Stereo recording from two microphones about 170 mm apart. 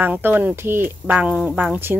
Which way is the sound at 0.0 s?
10° right (ahead or behind).